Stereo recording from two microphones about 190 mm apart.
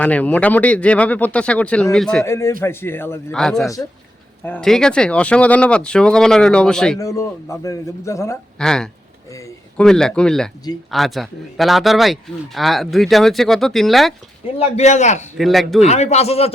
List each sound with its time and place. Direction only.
0.0 s speech: 10° left (ahead or behind)
2.2 s a man's voice: 15° left (ahead or behind)
7.0 s speech: 15° left (ahead or behind)
8.5 s a man's voice: 5° left (ahead or behind)
14.4 s a man's voice: 35° left (ahead or behind)
15.4 s a man's voice: centre (ahead or behind)
15.8 s a man's voice: 35° left (ahead or behind)